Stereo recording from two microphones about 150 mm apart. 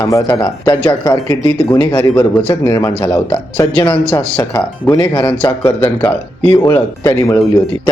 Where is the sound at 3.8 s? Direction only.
10° left (ahead or behind).